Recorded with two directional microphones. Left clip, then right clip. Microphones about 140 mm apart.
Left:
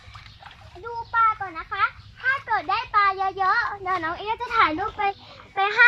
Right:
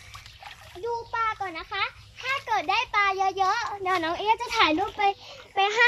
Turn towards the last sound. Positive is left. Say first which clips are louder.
# left 1 dB
turn(degrees=-40)  # may be behind; listen again after turning